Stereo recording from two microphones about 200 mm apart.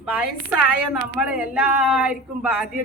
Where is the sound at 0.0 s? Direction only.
5° right (ahead or behind).